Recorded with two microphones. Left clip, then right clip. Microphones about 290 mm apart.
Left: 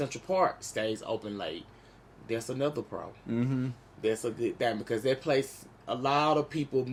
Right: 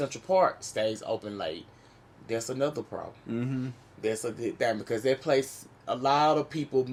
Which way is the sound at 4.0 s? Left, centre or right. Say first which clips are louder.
Left 1 dB; centre.